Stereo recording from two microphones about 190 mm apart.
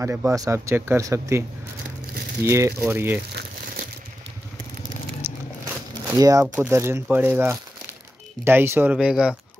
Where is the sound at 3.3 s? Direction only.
50° right (ahead or behind).